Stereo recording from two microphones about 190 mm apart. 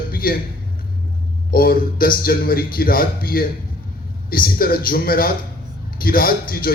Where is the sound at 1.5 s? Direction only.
50° left (ahead or behind).